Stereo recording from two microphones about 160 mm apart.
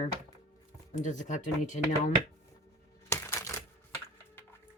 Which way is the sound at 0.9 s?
50° left (ahead or behind).